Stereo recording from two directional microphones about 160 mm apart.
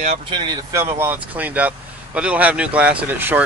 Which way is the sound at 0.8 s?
15° right (ahead or behind).